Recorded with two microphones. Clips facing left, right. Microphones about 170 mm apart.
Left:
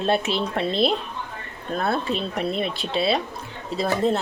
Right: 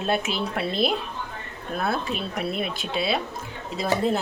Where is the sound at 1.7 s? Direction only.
Centre (ahead or behind).